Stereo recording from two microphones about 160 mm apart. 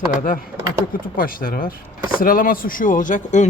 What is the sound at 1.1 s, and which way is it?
Speech, 65° left (ahead or behind).